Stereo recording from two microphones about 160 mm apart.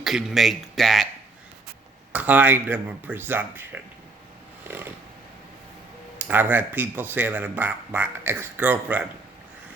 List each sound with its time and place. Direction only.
0.0 s speech: centre (ahead or behind)
2.1 s speech: 10° right (ahead or behind)
4.7 s a sound: 15° right (ahead or behind)
6.1 s speech: 10° right (ahead or behind)